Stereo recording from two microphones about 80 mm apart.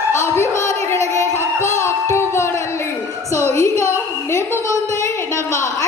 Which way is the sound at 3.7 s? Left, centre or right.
Right.